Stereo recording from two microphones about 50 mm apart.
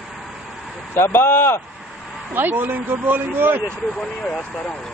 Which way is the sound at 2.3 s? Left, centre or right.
Right.